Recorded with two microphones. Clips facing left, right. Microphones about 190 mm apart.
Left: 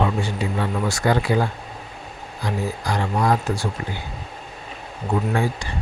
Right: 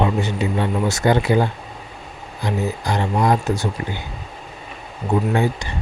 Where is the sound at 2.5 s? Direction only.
25° right (ahead or behind).